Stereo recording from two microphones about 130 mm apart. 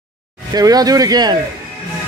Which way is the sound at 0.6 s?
30° right (ahead or behind).